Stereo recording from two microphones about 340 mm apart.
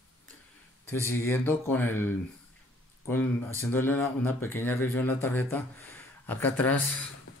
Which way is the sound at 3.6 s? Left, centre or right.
Centre.